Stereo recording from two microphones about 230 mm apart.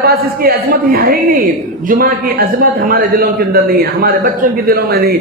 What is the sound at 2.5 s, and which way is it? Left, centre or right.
A man's voice, right.